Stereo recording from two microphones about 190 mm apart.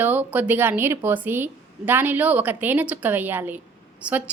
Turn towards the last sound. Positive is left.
turn(degrees=-10)  # may be behind; listen again after turning